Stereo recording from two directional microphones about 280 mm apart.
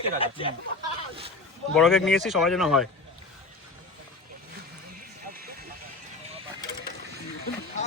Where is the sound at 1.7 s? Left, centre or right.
Centre.